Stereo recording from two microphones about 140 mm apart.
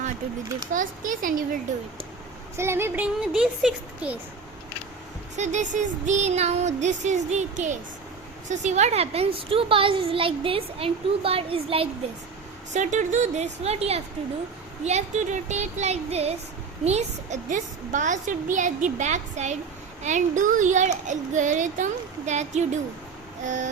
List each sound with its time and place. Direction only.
0.6 s a child's voice: 70° right (ahead or behind)
2.6 s speech: 15° right (ahead or behind)
5.4 s a woman's voice: 55° right (ahead or behind)
12.7 s a woman's voice: 60° right (ahead or behind)
14.8 s child singing: 55° right (ahead or behind)
16.8 s a woman's voice: 55° right (ahead or behind)